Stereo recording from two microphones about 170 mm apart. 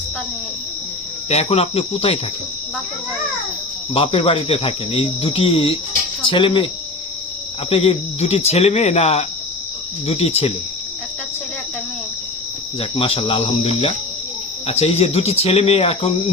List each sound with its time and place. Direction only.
1.3 s speech: 40° left (ahead or behind)
3.9 s speech: 35° left (ahead or behind)
7.7 s speech: 35° left (ahead or behind)
12.8 s speech: 35° left (ahead or behind)